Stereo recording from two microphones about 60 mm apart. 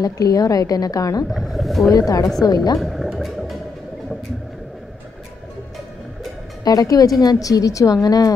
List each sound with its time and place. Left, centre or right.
0.0 s a woman's voice: left
1.3 s speech: centre
1.9 s a woman's voice: left
2.8 s gargling: centre
6.6 s speech: left